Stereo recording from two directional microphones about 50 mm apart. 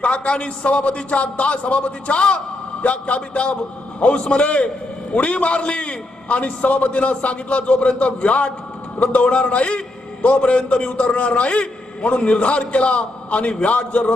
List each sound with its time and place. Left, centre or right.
0.0 s a man's voice: left